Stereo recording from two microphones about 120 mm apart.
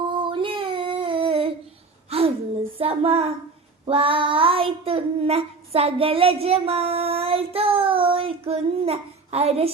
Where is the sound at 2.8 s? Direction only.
55° right (ahead or behind).